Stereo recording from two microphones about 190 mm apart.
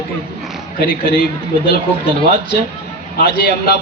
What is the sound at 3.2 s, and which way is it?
Speech, 60° left (ahead or behind).